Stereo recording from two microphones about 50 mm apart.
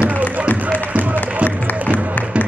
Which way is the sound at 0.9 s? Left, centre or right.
Right.